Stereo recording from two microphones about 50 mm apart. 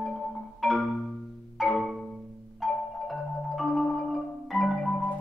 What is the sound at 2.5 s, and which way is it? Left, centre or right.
Music, centre.